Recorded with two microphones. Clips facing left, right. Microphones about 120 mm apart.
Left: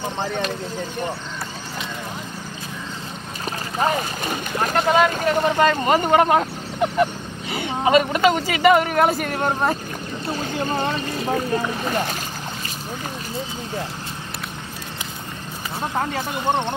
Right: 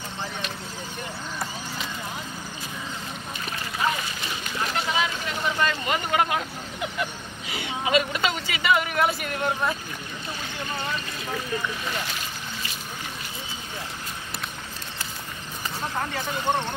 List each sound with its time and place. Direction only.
3.7 s speech: 45° left (ahead or behind)